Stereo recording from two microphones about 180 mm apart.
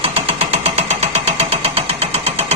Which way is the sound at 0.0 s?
35° right (ahead or behind).